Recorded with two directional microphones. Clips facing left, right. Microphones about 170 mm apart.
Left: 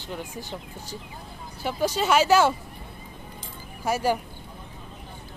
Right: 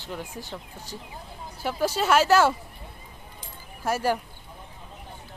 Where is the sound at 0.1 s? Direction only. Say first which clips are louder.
Left 1 dB; centre (ahead or behind).